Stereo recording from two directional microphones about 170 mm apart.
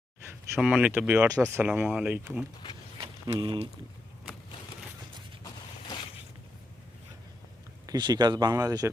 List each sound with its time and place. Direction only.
0.5 s speech: 5° right (ahead or behind)
3.0 s a sound: 25° right (ahead or behind)
7.9 s speech: 25° right (ahead or behind)